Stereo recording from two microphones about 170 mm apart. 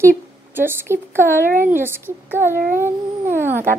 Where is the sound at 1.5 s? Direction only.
50° right (ahead or behind).